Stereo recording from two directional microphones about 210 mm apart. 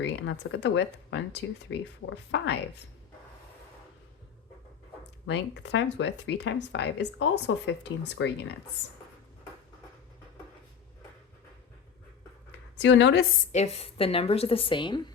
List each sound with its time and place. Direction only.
0.0 s speech: 55° left (ahead or behind)
5.2 s speech: 55° left (ahead or behind)
12.8 s speech: 60° left (ahead or behind)
13.5 s a woman's voice: 30° left (ahead or behind)